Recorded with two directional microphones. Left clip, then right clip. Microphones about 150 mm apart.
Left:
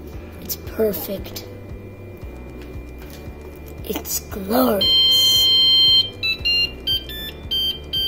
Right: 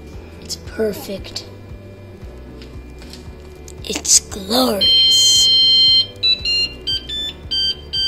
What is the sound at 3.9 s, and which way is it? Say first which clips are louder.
Speech: right 11 dB; 5° left (ahead or behind).